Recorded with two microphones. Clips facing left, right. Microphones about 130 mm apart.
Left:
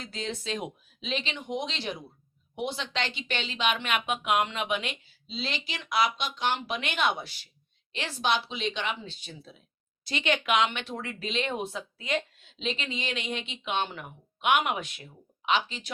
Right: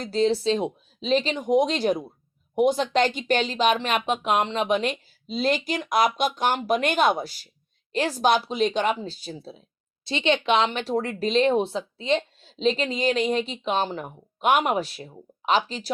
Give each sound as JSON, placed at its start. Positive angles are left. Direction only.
{"t": 0.0, "sound": "speech", "side_deg": -35}